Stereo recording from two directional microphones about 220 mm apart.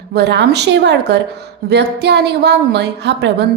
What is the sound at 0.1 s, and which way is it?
A woman's voice, 50° right (ahead or behind).